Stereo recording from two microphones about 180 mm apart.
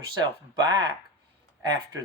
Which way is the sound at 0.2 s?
25° right (ahead or behind).